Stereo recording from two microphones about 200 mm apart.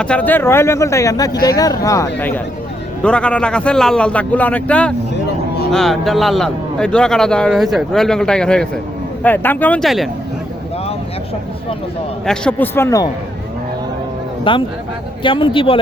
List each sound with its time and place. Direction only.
0.0 s a man's voice: 5° left (ahead or behind)
12.2 s speech: 5° left (ahead or behind)
14.5 s speech: 25° left (ahead or behind)